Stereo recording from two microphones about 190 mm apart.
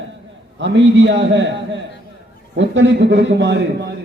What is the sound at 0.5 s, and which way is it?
A man's voice, 70° right (ahead or behind).